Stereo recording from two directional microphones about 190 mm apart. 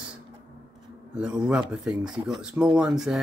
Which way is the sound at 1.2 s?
5° right (ahead or behind).